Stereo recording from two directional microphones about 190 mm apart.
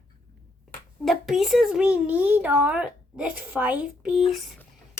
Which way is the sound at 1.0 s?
Centre (ahead or behind).